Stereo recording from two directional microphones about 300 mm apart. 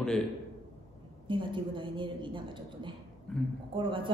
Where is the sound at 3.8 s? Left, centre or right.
Centre.